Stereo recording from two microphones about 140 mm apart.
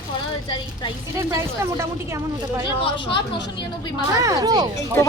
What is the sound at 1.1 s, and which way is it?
A woman's voice, 20° right (ahead or behind).